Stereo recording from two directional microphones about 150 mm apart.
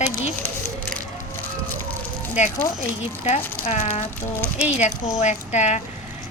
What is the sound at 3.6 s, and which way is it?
Speech, 50° left (ahead or behind).